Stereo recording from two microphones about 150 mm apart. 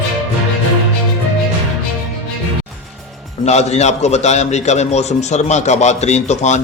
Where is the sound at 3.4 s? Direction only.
45° left (ahead or behind).